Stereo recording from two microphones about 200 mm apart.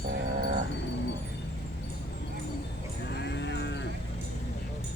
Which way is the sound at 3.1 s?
60° left (ahead or behind).